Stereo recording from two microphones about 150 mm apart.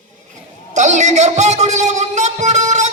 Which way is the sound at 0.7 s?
50° right (ahead or behind).